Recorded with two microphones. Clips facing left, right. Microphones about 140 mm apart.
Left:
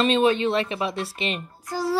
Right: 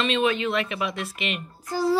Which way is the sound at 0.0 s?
35° left (ahead or behind).